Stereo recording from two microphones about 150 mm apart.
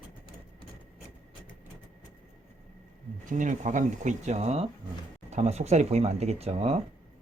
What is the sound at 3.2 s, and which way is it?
Speech, 60° right (ahead or behind).